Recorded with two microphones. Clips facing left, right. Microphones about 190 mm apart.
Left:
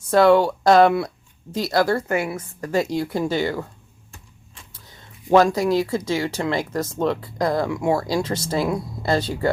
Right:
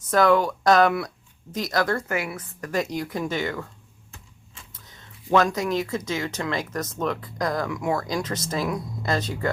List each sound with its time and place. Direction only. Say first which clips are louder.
0.1 s a woman's voice: left 4 dB; 30° left (ahead or behind)
4.9 s speech: left 5 dB; 30° left (ahead or behind)